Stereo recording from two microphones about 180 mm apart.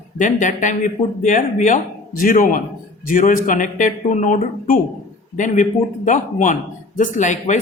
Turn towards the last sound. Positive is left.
turn(degrees=45)  # may be behind; listen again after turning